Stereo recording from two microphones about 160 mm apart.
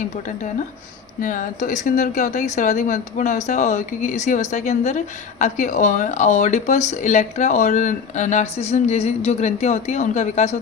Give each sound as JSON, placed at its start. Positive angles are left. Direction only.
{"t": 1.2, "sound": "speech", "side_deg": 55}